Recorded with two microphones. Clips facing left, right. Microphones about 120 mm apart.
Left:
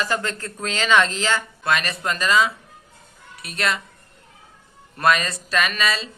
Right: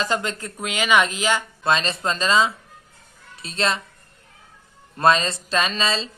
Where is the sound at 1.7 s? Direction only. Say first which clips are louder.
Right 1 dB; 25° right (ahead or behind).